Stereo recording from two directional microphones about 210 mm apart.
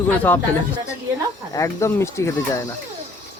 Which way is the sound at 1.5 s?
15° left (ahead or behind).